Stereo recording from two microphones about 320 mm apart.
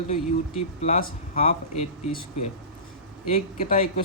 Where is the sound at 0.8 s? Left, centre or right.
Left.